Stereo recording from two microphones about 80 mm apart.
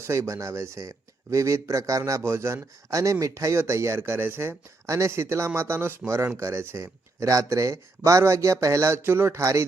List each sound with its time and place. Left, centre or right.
0.0 s speech: right